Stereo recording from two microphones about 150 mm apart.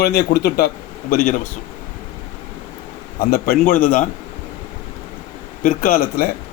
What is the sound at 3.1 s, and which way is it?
Speech, 85° left.